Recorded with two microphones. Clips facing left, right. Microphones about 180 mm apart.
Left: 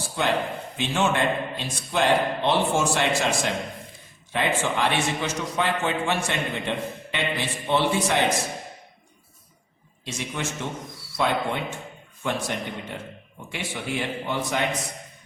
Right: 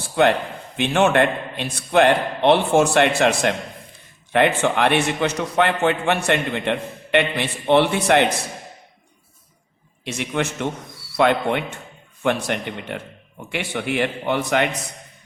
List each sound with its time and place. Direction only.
0.2 s a man's voice: 60° right (ahead or behind)
10.0 s a man's voice: 65° right (ahead or behind)